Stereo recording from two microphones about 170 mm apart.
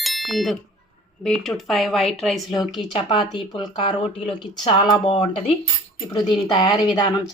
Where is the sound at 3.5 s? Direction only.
25° left (ahead or behind).